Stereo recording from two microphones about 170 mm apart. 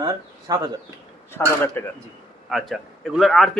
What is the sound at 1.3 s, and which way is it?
Speech, 15° left (ahead or behind).